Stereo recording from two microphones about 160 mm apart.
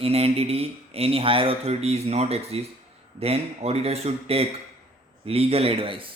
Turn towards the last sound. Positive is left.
turn(degrees=-35)  # may be behind; listen again after turning